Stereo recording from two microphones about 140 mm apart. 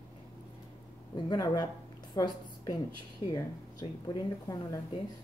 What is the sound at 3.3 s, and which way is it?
Speech, 30° left (ahead or behind).